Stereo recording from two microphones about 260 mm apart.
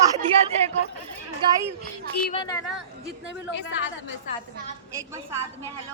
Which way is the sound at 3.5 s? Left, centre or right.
Left.